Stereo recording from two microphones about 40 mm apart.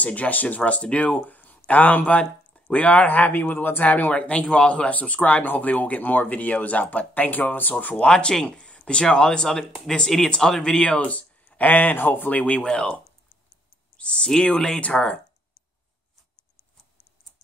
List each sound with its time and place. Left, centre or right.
0.0 s speech: left
0.7 s speech: left
4.1 s speech: left
4.9 s speech: left
8.0 s speech: left
8.6 s a sound: left
9.1 s speech: left
11.0 s speech: left
11.4 s a sound: left
11.9 s speech: left
12.4 s speech: left
13.9 s speech: left